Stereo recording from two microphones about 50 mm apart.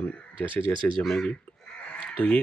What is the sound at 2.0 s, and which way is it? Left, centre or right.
Chicken, left.